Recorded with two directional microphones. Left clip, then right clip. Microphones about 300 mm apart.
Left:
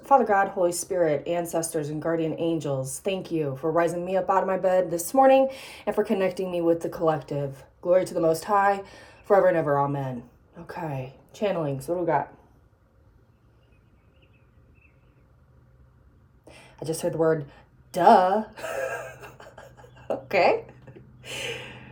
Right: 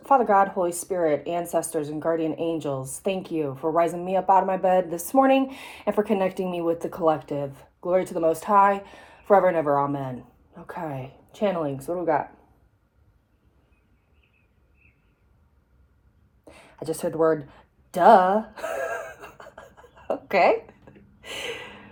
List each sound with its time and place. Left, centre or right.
0.0 s a woman's voice: centre
17.0 s a woman's voice: centre
17.5 s gasp: centre